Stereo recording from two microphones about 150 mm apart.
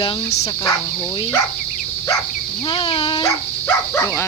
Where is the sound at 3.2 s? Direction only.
20° left (ahead or behind).